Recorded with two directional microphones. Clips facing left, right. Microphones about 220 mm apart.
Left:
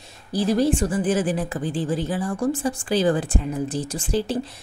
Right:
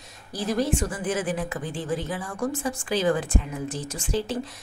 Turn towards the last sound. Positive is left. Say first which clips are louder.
# left 4 dB
turn(degrees=35)  # may be behind; listen again after turning